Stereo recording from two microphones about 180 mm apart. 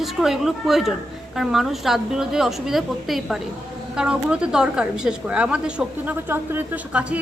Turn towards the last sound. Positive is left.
turn(degrees=-10)  # may be behind; listen again after turning